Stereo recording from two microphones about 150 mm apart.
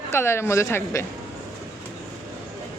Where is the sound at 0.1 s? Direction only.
15° left (ahead or behind).